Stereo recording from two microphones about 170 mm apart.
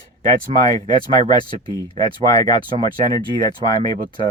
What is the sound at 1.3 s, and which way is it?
Speech, 25° left (ahead or behind).